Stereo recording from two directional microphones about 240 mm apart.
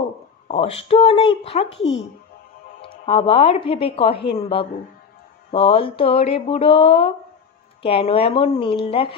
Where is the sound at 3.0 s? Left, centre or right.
Left.